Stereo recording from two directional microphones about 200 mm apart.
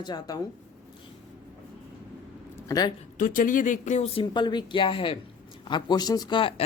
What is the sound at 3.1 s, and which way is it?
Speech, 40° left (ahead or behind).